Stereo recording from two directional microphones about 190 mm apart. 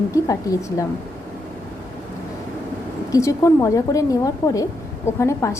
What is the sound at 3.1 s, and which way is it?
A woman's voice, 15° left (ahead or behind).